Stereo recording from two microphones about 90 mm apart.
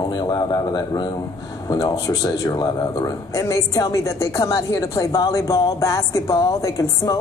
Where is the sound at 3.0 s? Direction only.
35° left (ahead or behind).